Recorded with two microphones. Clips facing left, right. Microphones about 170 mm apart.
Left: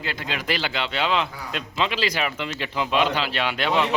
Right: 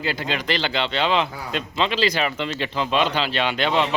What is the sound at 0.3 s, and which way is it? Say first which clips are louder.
A man's voice: even; 5° left (ahead or behind).